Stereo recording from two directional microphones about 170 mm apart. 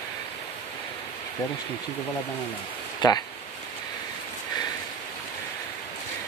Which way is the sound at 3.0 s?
25° left (ahead or behind).